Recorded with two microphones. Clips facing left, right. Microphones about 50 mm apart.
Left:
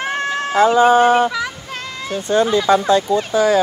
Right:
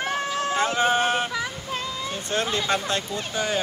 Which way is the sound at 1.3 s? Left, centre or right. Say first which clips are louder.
Left 4 dB; left.